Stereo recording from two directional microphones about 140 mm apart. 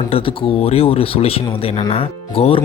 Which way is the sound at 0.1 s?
45° left (ahead or behind).